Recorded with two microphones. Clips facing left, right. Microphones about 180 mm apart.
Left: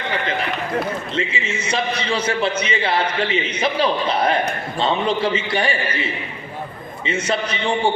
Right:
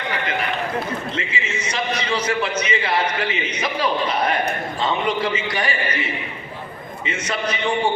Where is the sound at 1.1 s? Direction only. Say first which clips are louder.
Left 3 dB; 30° left (ahead or behind).